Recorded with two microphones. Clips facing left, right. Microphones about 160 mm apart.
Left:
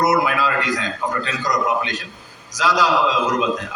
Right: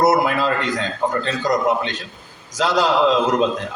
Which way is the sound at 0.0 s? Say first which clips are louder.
Right 2 dB; 50° right (ahead or behind).